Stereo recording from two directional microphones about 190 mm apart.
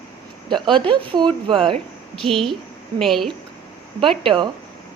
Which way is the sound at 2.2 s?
Centre (ahead or behind).